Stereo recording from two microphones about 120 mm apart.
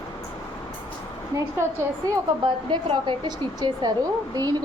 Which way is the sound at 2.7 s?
40° right (ahead or behind).